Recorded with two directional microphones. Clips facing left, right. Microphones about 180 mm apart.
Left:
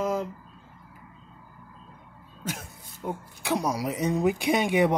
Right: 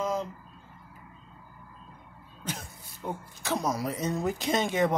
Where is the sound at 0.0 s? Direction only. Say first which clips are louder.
Left 3 dB; 5° left (ahead or behind).